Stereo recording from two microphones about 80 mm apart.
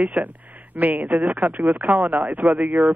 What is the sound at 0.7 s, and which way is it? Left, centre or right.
Speech, right.